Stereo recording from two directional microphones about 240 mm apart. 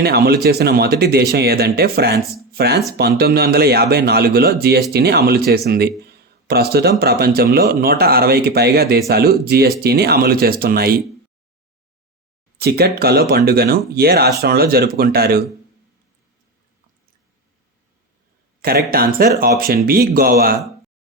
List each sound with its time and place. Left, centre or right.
0.0 s speech: right
6.0 s a sound: right
7.0 s speech: right
12.5 s speech: right
18.9 s speech: right